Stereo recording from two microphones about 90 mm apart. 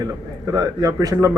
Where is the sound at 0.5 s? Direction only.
40° right (ahead or behind).